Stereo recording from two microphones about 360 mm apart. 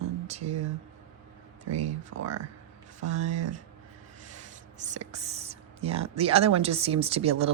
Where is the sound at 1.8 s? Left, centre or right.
Centre.